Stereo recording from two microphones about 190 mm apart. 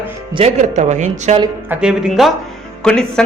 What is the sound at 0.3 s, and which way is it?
Speech, 35° right (ahead or behind).